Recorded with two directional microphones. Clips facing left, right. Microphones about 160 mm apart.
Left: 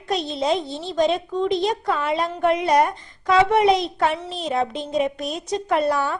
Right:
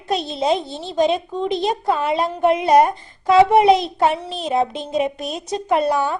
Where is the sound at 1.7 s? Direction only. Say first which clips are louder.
Right 3 dB; 25° right (ahead or behind).